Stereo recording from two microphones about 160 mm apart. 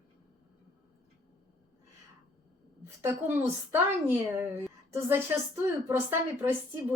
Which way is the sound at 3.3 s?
15° right (ahead or behind).